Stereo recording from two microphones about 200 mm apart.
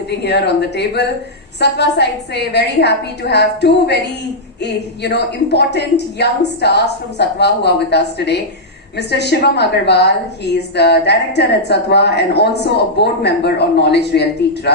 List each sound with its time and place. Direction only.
0.3 s a woman's voice: 55° left (ahead or behind)